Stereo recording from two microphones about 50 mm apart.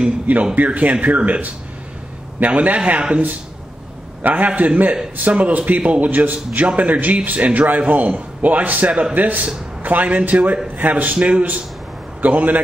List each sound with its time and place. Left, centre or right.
0.6 s a man's voice: right